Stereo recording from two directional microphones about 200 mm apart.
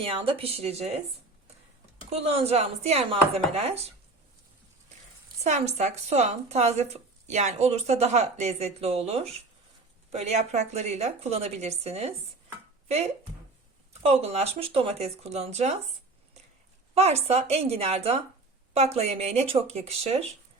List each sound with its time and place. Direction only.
0.0 s speech: 30° right (ahead or behind)
2.0 s speech: 30° right (ahead or behind)
5.4 s speech: 35° right (ahead or behind)
14.0 s speech: 30° right (ahead or behind)
16.9 s speech: 30° right (ahead or behind)